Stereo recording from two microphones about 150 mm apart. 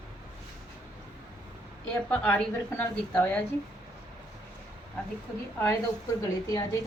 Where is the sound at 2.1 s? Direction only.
10° left (ahead or behind).